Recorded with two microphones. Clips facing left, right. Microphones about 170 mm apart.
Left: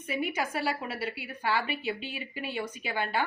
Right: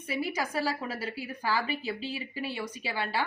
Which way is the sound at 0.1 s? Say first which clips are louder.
Even; 35° right (ahead or behind).